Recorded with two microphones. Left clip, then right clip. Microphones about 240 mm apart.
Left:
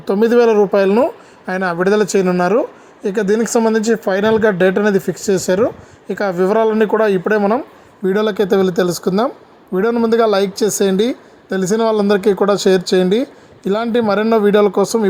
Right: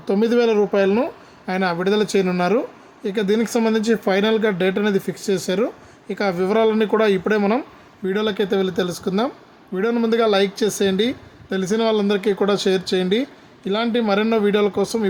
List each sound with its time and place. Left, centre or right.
0.0 s speech: centre
8.0 s speech: centre